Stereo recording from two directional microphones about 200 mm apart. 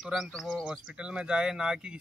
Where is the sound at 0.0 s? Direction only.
Centre (ahead or behind).